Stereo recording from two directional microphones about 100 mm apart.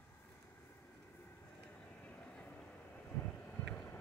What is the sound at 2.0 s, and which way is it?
Vehicle, 15° left (ahead or behind).